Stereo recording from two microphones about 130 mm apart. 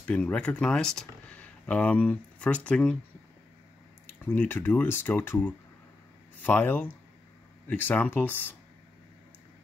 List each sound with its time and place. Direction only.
0.0 s speech: 10° left (ahead or behind)
4.2 s speech: 15° left (ahead or behind)